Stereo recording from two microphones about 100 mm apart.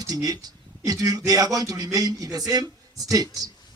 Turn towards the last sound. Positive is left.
turn(degrees=-40)  # may be behind; listen again after turning